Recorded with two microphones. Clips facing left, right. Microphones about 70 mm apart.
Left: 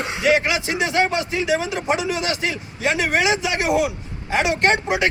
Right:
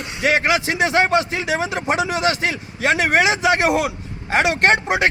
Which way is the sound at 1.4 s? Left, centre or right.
Right.